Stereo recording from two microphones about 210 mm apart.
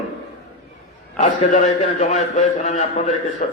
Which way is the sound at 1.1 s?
35° left (ahead or behind).